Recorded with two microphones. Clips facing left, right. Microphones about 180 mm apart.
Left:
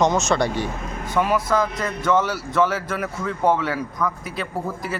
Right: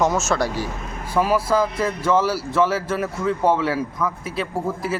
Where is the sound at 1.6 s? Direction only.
5° right (ahead or behind).